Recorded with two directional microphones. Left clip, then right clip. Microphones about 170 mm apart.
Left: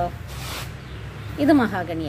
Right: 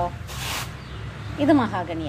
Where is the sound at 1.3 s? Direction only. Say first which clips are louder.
Left 1 dB; 30° left (ahead or behind).